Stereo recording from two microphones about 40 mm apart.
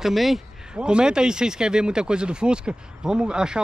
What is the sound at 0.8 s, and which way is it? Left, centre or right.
Speech, right.